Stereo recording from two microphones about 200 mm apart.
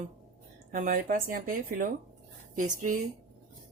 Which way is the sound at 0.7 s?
40° right (ahead or behind).